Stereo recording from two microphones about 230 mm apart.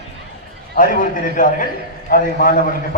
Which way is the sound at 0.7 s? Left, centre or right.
Left.